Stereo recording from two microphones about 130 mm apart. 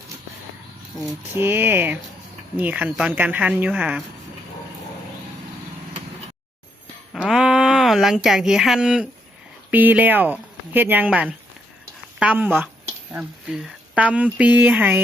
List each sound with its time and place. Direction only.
1.4 s speech: 15° right (ahead or behind)
7.1 s speech: 5° right (ahead or behind)